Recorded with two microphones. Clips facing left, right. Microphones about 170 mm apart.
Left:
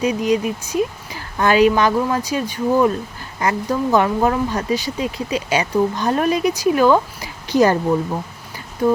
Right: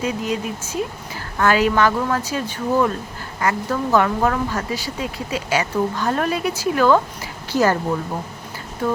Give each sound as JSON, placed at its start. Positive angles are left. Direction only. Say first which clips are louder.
{"t": 0.0, "sound": "speech", "louder": "left 5 dB", "side_deg": 20}